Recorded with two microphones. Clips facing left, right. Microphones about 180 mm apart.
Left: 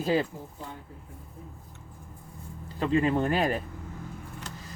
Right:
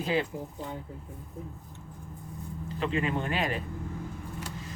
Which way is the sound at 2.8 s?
40° left (ahead or behind).